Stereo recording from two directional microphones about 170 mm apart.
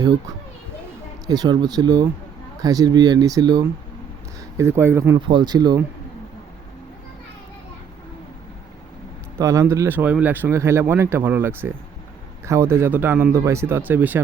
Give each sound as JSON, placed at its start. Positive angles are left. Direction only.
{"t": 1.3, "sound": "speech", "side_deg": -25}
{"t": 9.4, "sound": "speech", "side_deg": -20}